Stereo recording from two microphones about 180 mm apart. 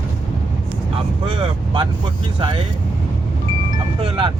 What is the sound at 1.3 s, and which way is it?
Vehicle, 30° right (ahead or behind).